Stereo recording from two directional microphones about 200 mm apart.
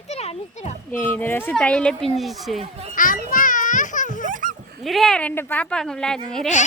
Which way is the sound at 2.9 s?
40° left (ahead or behind).